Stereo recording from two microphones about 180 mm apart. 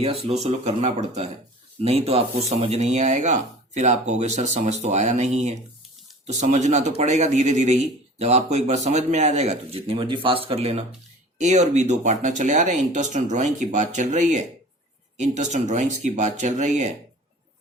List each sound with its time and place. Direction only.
0.0 s a man's voice: 35° right (ahead or behind)